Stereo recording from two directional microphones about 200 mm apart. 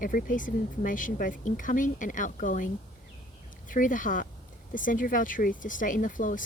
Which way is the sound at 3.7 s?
40° left (ahead or behind).